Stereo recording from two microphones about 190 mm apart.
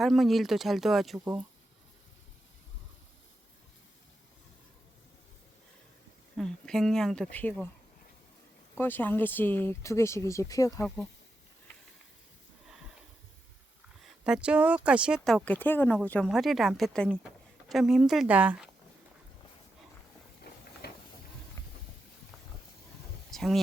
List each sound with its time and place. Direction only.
0.0 s speech: centre (ahead or behind)
6.3 s speech: 5° left (ahead or behind)
8.8 s speech: 10° left (ahead or behind)
10.8 s speech: 5° left (ahead or behind)
14.0 s speech: 5° right (ahead or behind)
20.8 s a sound: 55° left (ahead or behind)
21.6 s a sound: 20° left (ahead or behind)
23.3 s speech: centre (ahead or behind)